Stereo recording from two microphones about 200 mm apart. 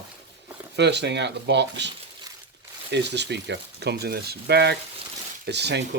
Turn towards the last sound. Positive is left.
turn(degrees=-55)  # may be behind; listen again after turning